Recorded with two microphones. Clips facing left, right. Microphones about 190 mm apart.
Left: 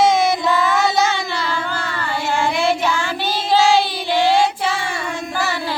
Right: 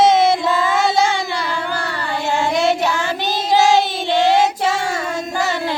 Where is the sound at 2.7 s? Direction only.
40° right (ahead or behind).